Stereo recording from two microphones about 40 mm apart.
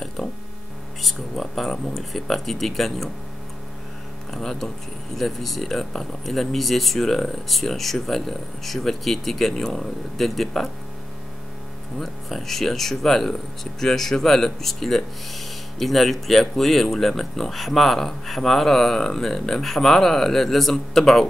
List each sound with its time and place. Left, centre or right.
0.2 s a sound: centre
1.0 s speech: centre
4.3 s speech: centre
12.0 s speech: centre